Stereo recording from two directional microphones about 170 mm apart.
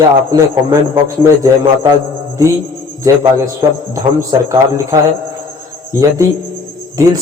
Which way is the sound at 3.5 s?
15° right (ahead or behind).